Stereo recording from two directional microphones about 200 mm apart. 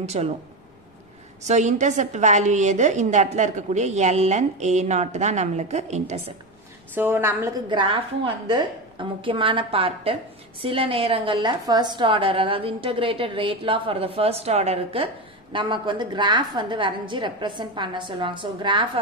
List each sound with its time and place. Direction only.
0.0 s a woman's voice: 35° right (ahead or behind)
1.4 s a woman's voice: 35° right (ahead or behind)
7.0 s a woman's voice: 10° right (ahead or behind)